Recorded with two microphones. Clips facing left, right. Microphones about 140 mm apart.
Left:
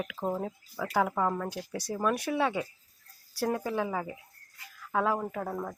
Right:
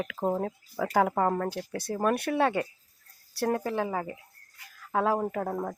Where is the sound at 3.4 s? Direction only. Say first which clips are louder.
Right 2 dB; 45° right (ahead or behind).